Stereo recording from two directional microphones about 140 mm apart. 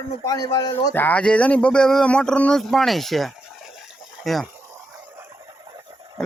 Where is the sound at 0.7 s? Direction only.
15° left (ahead or behind).